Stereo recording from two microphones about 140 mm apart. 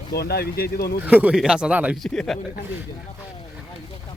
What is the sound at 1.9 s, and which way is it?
Speech, 5° left (ahead or behind).